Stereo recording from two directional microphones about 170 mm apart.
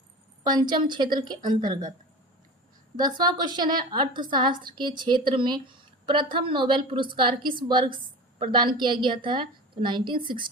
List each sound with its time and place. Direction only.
0.4 s a woman's voice: 25° right (ahead or behind)
2.9 s a woman's voice: 25° right (ahead or behind)